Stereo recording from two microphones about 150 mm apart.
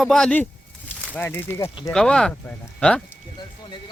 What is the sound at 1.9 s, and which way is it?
Speech, 5° left (ahead or behind).